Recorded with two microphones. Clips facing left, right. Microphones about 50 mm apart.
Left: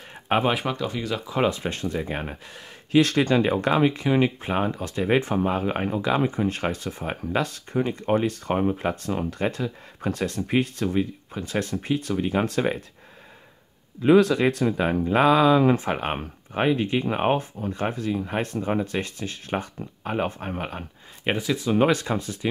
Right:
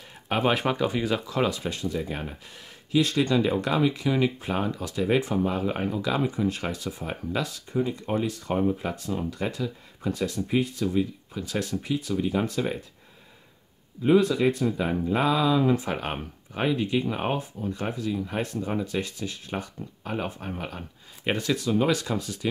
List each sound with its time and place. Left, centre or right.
0.5 s speech: centre
0.7 s speech: centre
1.2 s speech: left
2.9 s speech: left
14.0 s speech: left
14.9 s speech: left
15.8 s speech: left
21.3 s speech: centre
21.8 s speech: left